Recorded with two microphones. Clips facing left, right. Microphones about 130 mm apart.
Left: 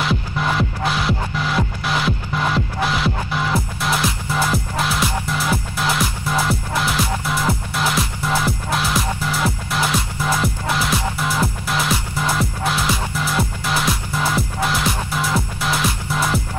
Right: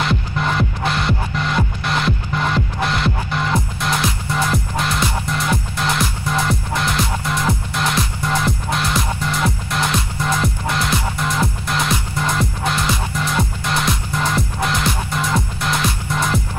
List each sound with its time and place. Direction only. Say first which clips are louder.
0.0 s music: right 1 dB; centre (ahead or behind)